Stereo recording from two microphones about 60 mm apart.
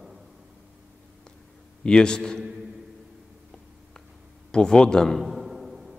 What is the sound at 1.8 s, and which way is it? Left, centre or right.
Speech, centre.